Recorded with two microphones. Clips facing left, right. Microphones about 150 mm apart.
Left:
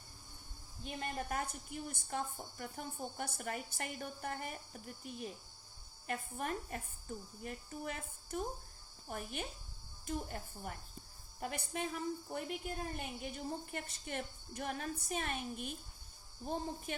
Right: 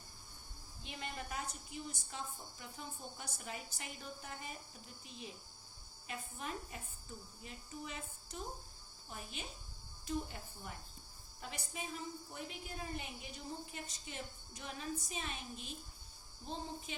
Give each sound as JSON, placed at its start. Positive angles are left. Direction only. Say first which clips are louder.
{"t": 0.9, "sound": "a woman's voice", "louder": "left 5 dB", "side_deg": 45}